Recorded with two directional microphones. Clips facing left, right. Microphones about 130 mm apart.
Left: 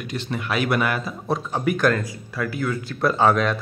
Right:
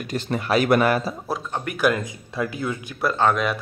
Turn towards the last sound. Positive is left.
turn(degrees=5)  # may be behind; listen again after turning